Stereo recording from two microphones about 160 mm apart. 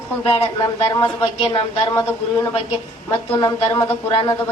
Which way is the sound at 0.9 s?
30° left (ahead or behind).